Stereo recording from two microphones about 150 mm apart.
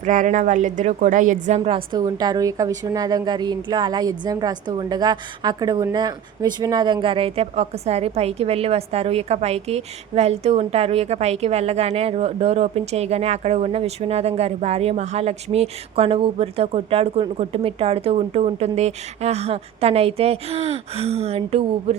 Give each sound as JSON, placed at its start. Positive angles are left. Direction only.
{"t": 0.0, "sound": "speech", "side_deg": -55}
{"t": 1.7, "sound": "a woman's voice", "side_deg": -25}